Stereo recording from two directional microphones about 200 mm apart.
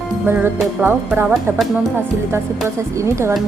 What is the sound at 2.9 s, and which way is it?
Speech, 15° right (ahead or behind).